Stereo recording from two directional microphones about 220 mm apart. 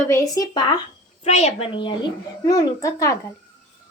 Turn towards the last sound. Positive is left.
turn(degrees=15)  # may be behind; listen again after turning